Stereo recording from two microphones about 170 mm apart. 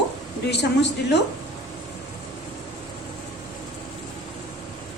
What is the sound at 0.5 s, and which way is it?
Speech, 90° left.